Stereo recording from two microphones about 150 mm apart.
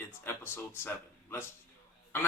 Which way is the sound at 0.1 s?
15° left (ahead or behind).